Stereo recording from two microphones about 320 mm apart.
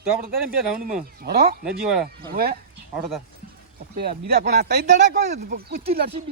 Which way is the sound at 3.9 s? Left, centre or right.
Right.